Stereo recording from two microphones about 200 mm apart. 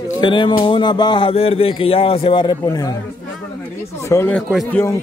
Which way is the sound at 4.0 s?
15° left (ahead or behind).